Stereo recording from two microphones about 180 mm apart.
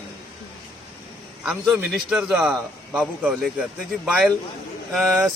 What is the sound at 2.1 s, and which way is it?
A man's voice, 5° right (ahead or behind).